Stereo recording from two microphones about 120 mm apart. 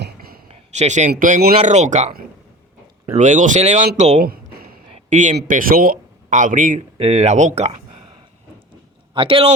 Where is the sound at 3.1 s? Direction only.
90° right; by 4.2 s 70° right (ahead or behind).